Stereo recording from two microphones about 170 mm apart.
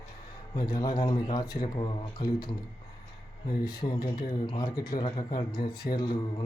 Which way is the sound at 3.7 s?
25° left (ahead or behind).